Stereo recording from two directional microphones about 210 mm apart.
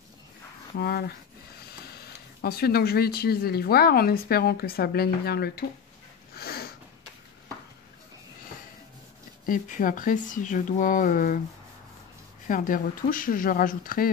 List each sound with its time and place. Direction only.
0.7 s speech: 50° left (ahead or behind)
6.3 s sniff: 45° left (ahead or behind)
9.5 s speech: 40° left (ahead or behind)
12.4 s speech: 40° left (ahead or behind)